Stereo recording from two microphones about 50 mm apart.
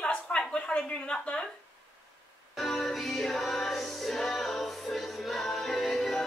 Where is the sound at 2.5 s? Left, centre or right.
Centre.